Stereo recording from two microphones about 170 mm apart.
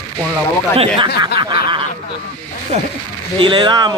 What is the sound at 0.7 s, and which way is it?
Speech, 35° right (ahead or behind).